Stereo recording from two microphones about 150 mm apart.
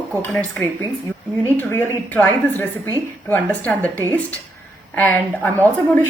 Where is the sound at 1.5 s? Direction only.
10° left (ahead or behind).